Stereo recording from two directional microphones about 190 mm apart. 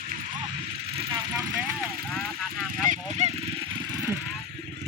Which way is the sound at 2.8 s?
35° right (ahead or behind).